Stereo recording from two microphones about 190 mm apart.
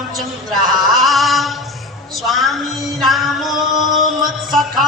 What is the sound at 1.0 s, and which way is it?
Music, centre (ahead or behind).